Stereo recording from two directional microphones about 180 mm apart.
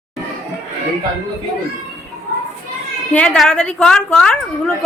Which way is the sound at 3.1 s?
5° left (ahead or behind).